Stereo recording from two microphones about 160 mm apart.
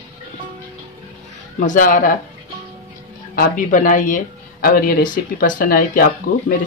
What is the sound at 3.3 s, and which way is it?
Speech, 55° left (ahead or behind).